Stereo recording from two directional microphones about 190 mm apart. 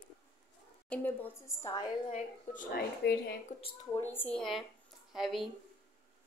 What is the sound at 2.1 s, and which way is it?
Speech, 45° left (ahead or behind).